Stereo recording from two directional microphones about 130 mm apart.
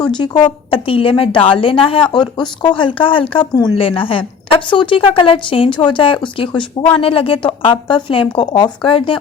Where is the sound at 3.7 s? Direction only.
45° left (ahead or behind).